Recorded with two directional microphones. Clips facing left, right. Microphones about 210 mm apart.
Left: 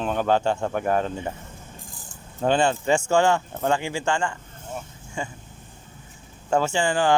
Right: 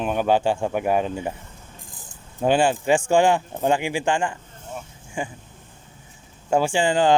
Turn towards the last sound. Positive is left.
turn(degrees=-20)  # may be behind; listen again after turning